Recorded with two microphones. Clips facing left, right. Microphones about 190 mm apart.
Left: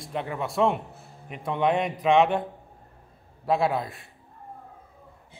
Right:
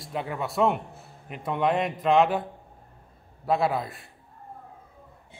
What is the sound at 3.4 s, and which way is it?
Speech, centre (ahead or behind).